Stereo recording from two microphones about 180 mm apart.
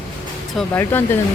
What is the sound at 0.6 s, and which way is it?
Speech, 10° left (ahead or behind).